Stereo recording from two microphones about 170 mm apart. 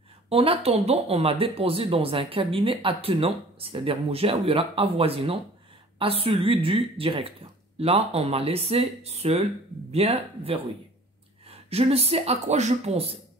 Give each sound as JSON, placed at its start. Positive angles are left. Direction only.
{"t": 0.3, "sound": "speech", "side_deg": -35}